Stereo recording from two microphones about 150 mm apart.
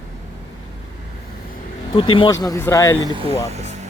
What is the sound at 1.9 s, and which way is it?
Speech, 35° left (ahead or behind).